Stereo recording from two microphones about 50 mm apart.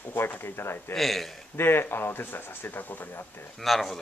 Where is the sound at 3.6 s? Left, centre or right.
Centre.